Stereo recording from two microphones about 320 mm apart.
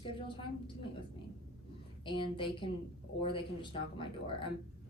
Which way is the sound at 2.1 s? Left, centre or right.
Centre.